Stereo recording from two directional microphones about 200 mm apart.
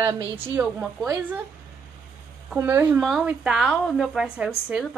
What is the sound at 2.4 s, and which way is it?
Speech, 10° right (ahead or behind).